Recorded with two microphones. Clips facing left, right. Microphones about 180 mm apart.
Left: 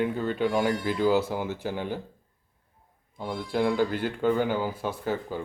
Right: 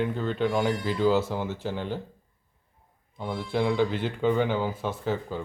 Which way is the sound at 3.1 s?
5° left (ahead or behind).